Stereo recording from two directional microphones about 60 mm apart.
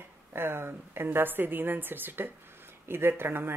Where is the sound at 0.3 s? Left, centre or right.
Right.